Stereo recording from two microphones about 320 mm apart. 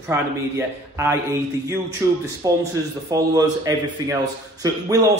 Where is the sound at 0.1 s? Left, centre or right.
Centre.